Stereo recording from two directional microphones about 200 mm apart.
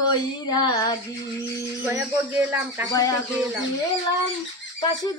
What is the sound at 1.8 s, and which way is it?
Speech, 15° right (ahead or behind).